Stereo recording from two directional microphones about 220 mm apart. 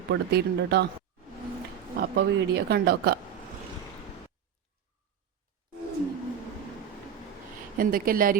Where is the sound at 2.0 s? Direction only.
50° right (ahead or behind).